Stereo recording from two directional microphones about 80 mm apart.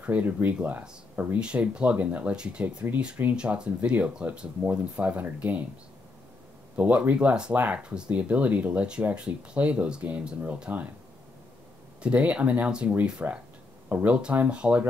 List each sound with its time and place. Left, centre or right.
0.0 s speech: centre
6.8 s speech: centre
12.0 s speech: centre